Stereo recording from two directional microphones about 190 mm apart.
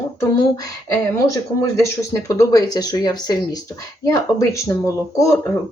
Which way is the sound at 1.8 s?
15° left (ahead or behind).